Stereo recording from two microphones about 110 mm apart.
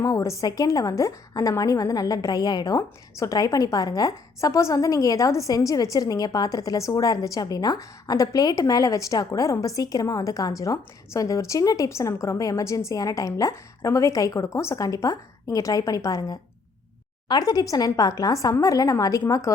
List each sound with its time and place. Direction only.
0.0 s a woman's voice: 30° left (ahead or behind)